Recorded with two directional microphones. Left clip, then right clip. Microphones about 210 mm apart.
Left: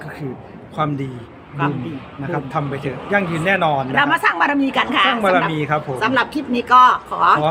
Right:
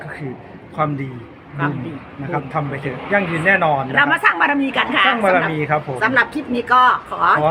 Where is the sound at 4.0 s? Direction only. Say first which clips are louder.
Right 1 dB; 15° left (ahead or behind).